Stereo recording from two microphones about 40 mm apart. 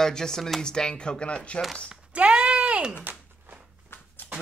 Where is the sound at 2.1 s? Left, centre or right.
Right.